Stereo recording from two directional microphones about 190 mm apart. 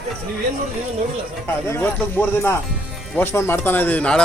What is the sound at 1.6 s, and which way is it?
A man's voice, 10° left (ahead or behind).